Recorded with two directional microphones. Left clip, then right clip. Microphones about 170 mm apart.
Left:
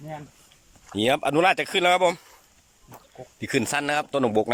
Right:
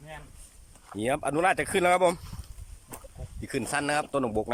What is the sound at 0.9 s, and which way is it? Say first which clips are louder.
Speech: left 6 dB; centre (ahead or behind).